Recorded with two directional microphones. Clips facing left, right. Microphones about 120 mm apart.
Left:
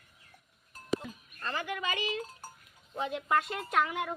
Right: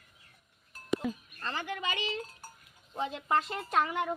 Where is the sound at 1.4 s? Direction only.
30° right (ahead or behind).